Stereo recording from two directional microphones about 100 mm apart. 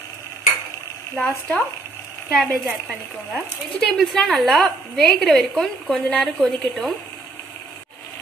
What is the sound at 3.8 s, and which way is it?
A woman's voice, centre (ahead or behind).